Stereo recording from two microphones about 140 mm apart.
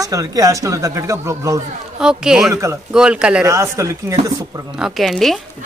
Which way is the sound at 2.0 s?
5° right (ahead or behind).